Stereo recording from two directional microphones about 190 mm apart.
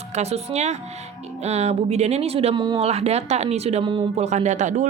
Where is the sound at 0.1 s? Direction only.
35° right (ahead or behind).